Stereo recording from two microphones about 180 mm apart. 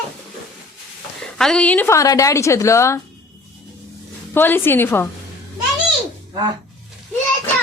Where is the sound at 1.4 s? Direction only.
5° left (ahead or behind).